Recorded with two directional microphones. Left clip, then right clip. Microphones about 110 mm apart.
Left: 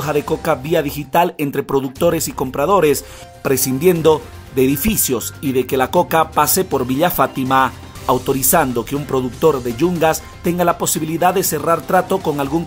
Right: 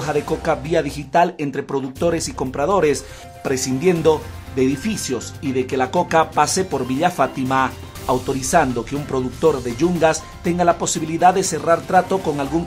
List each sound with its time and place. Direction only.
0.0 s speech: 35° left (ahead or behind)
3.4 s speech: 45° left (ahead or behind)